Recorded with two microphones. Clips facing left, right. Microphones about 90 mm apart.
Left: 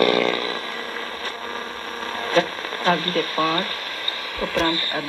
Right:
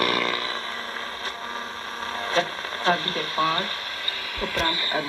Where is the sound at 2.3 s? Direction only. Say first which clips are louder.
Left 5 dB; 25° right (ahead or behind).